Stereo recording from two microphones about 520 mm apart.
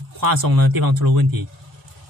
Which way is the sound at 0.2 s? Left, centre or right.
Right.